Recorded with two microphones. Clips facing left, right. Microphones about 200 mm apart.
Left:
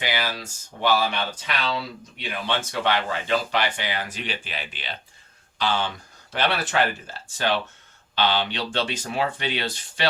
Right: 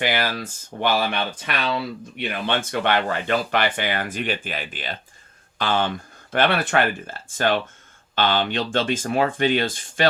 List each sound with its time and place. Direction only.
0.0 s speech: 55° right (ahead or behind)